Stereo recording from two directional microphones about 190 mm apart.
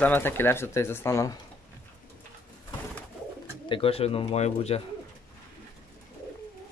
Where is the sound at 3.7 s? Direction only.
30° left (ahead or behind).